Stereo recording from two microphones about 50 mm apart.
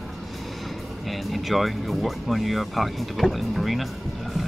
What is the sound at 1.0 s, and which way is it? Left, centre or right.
Speech, centre.